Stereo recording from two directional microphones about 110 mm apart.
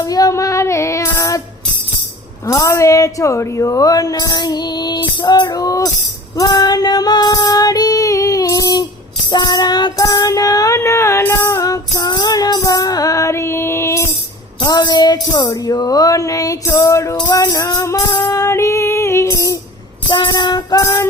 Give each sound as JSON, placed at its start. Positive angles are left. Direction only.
{"t": 0.1, "sound": "child singing", "side_deg": 30}
{"t": 2.5, "sound": "a woman's voice", "side_deg": 25}
{"t": 6.3, "sound": "female singing", "side_deg": 35}
{"t": 9.3, "sound": "music", "side_deg": 40}
{"t": 14.6, "sound": "a woman's voice", "side_deg": 40}
{"t": 17.2, "sound": "a woman's voice", "side_deg": 40}
{"t": 18.3, "sound": "music", "side_deg": 30}
{"t": 20.1, "sound": "music", "side_deg": 40}
{"t": 20.8, "sound": "music", "side_deg": 25}